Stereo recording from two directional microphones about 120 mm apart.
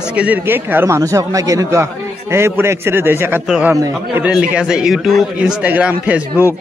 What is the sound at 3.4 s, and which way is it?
A man's voice, 5° right (ahead or behind).